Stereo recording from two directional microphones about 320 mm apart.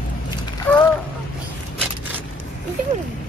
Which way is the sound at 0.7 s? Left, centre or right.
Centre.